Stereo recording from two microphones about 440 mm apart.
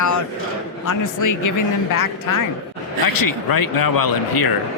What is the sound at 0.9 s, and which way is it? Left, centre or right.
Speech, left.